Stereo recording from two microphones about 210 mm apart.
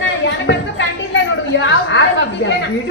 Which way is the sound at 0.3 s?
60° left (ahead or behind).